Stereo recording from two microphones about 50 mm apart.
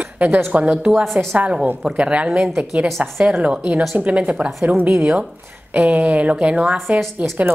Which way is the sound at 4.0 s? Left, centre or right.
Right.